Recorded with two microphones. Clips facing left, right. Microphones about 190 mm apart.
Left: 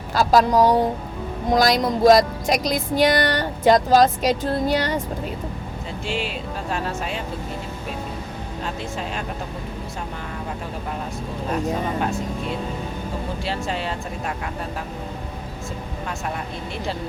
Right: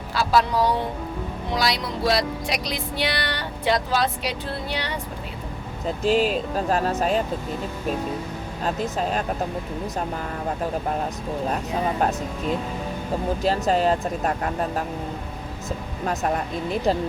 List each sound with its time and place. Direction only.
0.1 s music: 45° left (ahead or behind)
6.0 s speech: 40° right (ahead or behind)
8.6 s speech: 40° right (ahead or behind)
13.4 s speech: 40° right (ahead or behind)